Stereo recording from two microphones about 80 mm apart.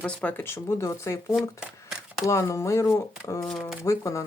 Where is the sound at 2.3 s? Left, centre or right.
Left.